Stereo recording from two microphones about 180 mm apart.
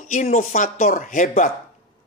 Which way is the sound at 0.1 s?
45° left (ahead or behind).